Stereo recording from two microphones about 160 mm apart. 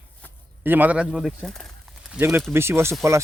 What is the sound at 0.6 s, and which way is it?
Speech, 10° right (ahead or behind).